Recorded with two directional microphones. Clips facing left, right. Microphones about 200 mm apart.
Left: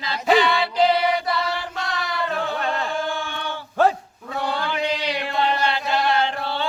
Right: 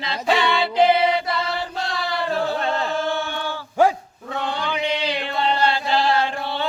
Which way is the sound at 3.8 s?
10° right (ahead or behind).